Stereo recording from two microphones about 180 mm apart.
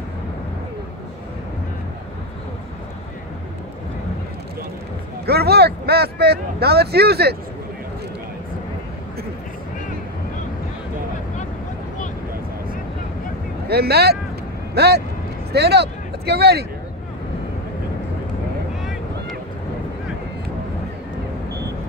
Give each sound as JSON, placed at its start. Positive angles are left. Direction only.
{"t": 5.2, "sound": "speech", "side_deg": -65}
{"t": 13.7, "sound": "speech", "side_deg": -65}